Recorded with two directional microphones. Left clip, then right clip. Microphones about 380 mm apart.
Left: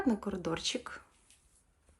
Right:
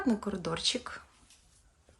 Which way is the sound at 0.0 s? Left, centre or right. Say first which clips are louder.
Right 1 dB; centre.